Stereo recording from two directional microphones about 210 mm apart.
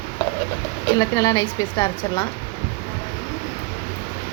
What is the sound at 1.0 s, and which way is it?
Speech, 15° left (ahead or behind).